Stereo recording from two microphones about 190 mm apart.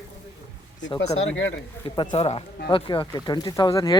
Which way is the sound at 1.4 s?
80° left.